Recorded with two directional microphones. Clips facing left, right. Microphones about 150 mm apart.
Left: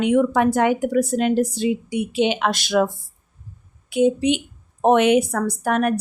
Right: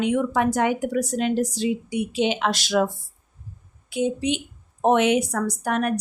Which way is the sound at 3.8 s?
60° left (ahead or behind).